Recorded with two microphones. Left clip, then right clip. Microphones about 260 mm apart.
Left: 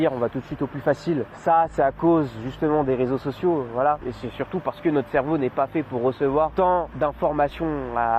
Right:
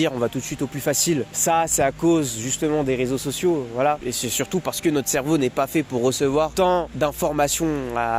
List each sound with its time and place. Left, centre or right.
0.9 s speech: right